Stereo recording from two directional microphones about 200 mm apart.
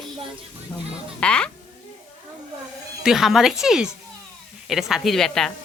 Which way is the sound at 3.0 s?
Centre (ahead or behind).